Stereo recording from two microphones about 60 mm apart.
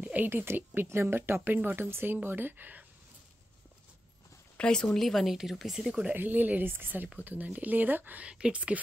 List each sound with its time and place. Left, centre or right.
0.0 s a sound: right
0.3 s speech: right
4.6 s speech: centre
4.8 s speech: centre
5.9 s speech: centre
6.1 s speech: right